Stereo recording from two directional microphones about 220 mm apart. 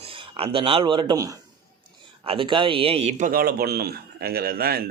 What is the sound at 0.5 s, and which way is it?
A man's voice, 25° right (ahead or behind).